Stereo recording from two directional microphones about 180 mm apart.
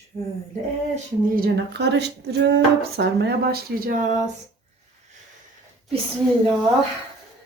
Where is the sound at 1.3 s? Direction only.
60° right (ahead or behind).